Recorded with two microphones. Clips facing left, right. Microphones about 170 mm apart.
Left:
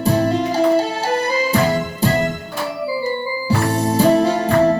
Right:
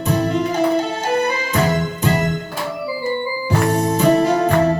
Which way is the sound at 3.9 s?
35° left (ahead or behind).